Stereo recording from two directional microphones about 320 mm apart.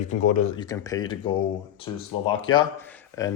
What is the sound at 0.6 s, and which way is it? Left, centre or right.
A man's voice, centre.